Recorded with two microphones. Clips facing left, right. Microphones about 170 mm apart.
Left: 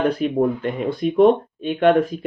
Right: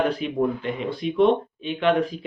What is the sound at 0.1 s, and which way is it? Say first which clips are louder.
Speech: left 4 dB; 45° left (ahead or behind).